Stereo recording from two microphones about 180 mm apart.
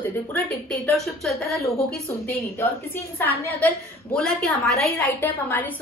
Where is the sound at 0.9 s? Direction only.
Centre (ahead or behind).